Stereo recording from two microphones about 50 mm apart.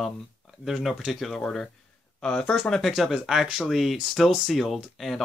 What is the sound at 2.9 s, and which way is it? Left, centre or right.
Speech, centre.